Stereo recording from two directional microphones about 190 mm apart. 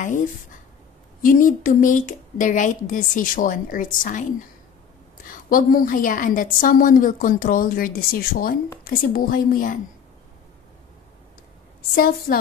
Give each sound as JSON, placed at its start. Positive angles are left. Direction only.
{"t": 1.2, "sound": "a woman's voice", "side_deg": 45}
{"t": 11.9, "sound": "a woman's voice", "side_deg": 50}